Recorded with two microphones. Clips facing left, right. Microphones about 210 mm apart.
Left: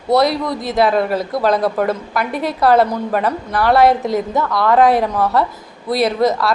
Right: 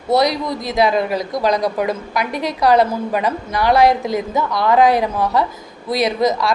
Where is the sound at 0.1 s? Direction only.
Centre (ahead or behind).